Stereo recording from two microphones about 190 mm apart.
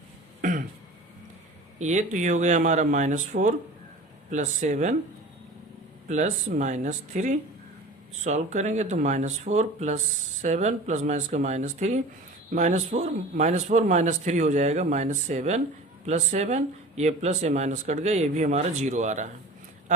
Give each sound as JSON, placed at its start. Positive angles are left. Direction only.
{"t": 0.4, "sound": "throat clearing", "side_deg": -45}
{"t": 1.8, "sound": "speech", "side_deg": -40}
{"t": 4.3, "sound": "speech", "side_deg": -40}
{"t": 6.1, "sound": "speech", "side_deg": -40}